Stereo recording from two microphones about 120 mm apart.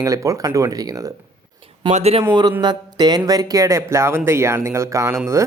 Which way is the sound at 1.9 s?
60° right (ahead or behind).